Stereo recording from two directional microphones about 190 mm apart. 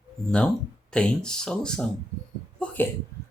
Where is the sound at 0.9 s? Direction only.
5° left (ahead or behind).